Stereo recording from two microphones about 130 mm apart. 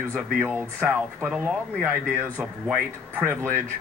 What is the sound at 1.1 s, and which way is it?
Speech, 10° right (ahead or behind).